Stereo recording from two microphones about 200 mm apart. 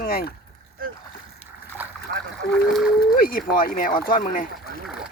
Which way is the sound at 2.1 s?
55° right (ahead or behind).